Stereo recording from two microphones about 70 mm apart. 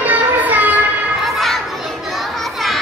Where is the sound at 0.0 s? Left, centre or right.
Right.